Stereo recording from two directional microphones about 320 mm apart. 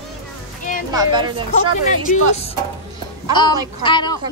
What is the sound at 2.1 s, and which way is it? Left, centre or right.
A woman's voice, centre.